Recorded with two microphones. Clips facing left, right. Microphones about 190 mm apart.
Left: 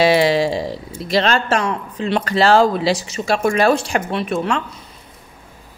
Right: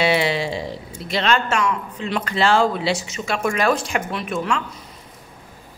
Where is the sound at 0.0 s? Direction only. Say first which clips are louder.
Left 6 dB; 40° left (ahead or behind).